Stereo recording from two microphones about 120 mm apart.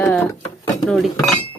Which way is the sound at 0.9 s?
Centre (ahead or behind).